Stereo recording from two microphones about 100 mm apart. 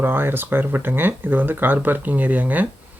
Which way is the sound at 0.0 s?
20° right (ahead or behind).